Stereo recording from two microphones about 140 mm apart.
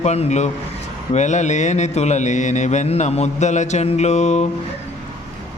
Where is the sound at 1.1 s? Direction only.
55° left (ahead or behind).